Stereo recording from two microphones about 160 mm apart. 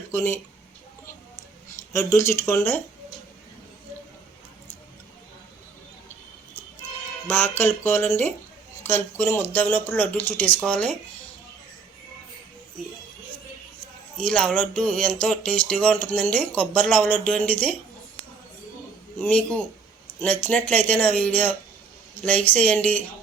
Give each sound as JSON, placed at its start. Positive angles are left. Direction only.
{"t": 0.1, "sound": "speech", "side_deg": 15}
{"t": 1.9, "sound": "speech", "side_deg": 15}
{"t": 7.3, "sound": "speech", "side_deg": 15}
{"t": 14.2, "sound": "speech", "side_deg": 5}
{"t": 19.2, "sound": "speech", "side_deg": 10}